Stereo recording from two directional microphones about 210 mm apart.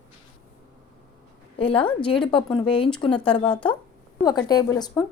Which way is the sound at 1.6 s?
25° left (ahead or behind).